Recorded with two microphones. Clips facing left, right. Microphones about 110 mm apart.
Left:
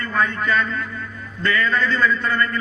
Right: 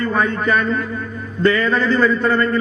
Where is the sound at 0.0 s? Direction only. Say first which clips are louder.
Right 4 dB; 20° right (ahead or behind).